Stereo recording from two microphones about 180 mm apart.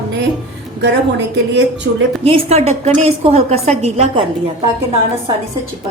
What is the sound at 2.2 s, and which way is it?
A woman's voice, 35° right (ahead or behind).